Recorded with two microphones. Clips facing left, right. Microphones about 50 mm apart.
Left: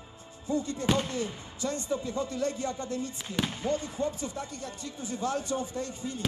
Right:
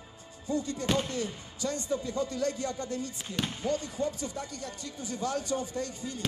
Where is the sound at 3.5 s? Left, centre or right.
Left.